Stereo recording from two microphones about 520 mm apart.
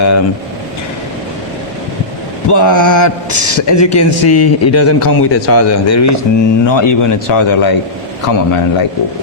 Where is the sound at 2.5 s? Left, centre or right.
Left.